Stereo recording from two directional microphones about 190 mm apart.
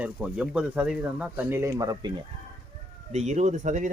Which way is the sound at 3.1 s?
35° right (ahead or behind).